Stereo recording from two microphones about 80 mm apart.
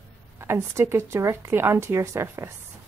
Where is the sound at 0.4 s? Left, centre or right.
Right.